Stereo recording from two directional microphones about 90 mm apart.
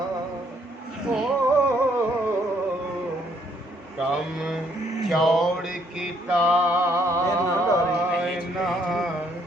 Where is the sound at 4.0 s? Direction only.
5° right (ahead or behind).